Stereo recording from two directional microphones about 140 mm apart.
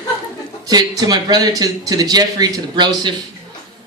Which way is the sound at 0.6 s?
25° right (ahead or behind).